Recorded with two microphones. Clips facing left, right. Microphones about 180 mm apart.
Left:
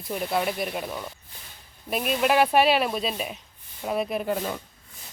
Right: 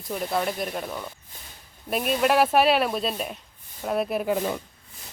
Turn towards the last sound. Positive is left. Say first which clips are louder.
# right 2 dB
turn(degrees=-5)  # may be behind; listen again after turning